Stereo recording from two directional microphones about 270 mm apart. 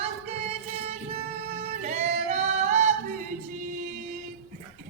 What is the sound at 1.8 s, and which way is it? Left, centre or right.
Singing, right.